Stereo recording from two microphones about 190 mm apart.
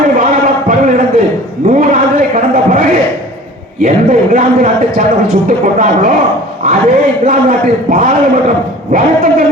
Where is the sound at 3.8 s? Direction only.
45° right (ahead or behind).